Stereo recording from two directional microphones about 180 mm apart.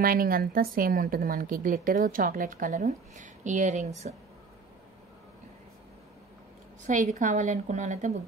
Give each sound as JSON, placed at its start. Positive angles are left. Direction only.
{"t": 0.0, "sound": "a woman's voice", "side_deg": -55}
{"t": 6.9, "sound": "a woman's voice", "side_deg": -45}